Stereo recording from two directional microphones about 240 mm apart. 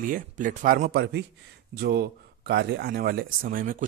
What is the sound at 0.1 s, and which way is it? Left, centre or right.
Speech, right.